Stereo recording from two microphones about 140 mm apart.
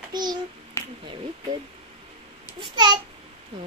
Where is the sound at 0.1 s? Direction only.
30° right (ahead or behind).